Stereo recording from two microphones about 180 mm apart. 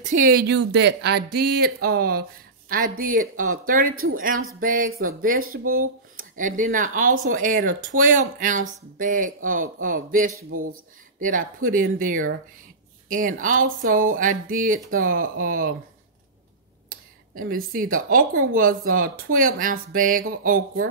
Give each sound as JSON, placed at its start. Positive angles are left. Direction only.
{"t": 0.0, "sound": "speech", "side_deg": -45}
{"t": 17.4, "sound": "speech", "side_deg": -50}